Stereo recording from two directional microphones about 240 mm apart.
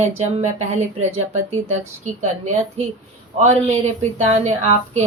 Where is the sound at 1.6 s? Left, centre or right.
Right.